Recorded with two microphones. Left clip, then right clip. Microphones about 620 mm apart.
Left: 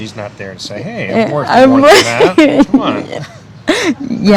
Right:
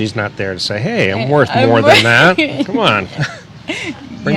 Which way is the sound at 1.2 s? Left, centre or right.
Left.